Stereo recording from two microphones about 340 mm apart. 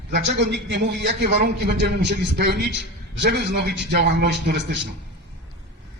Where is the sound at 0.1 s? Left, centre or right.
Right.